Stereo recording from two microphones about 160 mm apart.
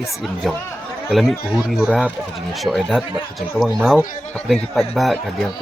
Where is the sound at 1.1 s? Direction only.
Centre (ahead or behind).